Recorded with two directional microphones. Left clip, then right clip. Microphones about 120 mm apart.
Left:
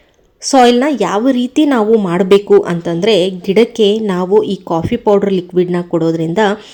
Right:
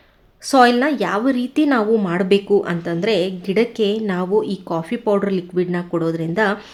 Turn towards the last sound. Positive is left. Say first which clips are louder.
# left 6 dB
turn(degrees=40)  # may be behind; listen again after turning